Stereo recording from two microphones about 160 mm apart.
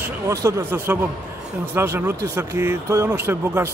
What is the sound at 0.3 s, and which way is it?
Speech, 15° right (ahead or behind).